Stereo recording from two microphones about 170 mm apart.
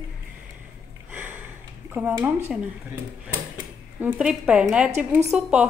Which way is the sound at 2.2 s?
5° right (ahead or behind).